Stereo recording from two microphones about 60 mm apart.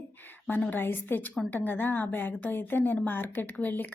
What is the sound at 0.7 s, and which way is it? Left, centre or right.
A woman's voice, left.